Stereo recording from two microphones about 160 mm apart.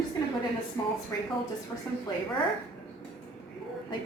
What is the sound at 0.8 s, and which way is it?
Speech, 20° left (ahead or behind).